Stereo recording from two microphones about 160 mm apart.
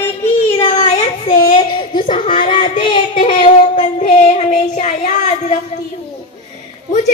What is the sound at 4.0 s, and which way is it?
Child singing, 45° left (ahead or behind).